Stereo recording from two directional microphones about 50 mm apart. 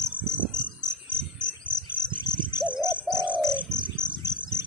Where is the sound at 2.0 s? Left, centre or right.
Centre.